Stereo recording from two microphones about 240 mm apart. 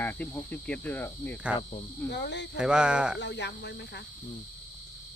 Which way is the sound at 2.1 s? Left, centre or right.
Left.